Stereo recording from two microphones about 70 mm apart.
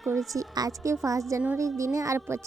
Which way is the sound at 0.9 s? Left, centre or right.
Right.